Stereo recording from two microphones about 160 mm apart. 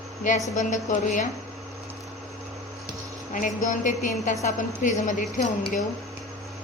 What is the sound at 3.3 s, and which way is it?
A woman's voice, 50° left (ahead or behind).